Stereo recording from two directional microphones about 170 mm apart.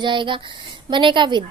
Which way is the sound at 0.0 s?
30° right (ahead or behind).